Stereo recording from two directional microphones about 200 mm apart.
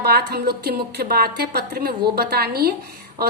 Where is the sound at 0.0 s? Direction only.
55° right (ahead or behind).